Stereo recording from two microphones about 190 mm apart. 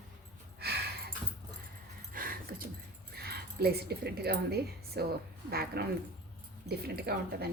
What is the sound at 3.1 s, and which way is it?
Speech, 55° right (ahead or behind).